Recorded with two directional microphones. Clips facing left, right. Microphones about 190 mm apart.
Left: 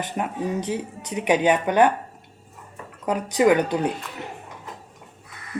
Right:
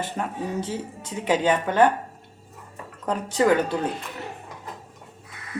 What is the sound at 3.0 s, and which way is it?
Speech, 15° left (ahead or behind).